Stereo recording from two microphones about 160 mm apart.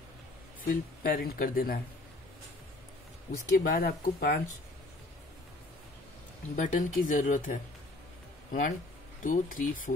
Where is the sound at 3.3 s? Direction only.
60° left (ahead or behind).